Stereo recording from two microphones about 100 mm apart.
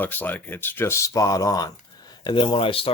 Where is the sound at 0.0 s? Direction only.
20° left (ahead or behind).